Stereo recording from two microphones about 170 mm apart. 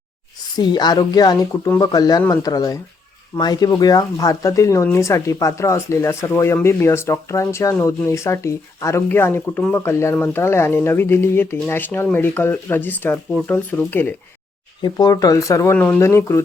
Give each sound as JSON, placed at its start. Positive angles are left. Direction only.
{"t": 0.5, "sound": "speech", "side_deg": 25}
{"t": 14.8, "sound": "speech", "side_deg": 25}